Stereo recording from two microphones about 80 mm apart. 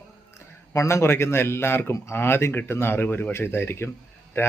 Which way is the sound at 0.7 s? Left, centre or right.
Left.